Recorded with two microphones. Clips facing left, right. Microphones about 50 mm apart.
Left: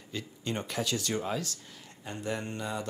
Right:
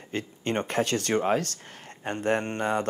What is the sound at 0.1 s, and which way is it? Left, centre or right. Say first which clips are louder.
Speech: right 6 dB; right.